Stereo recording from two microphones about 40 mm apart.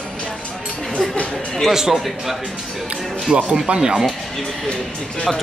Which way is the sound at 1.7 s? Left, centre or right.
Centre.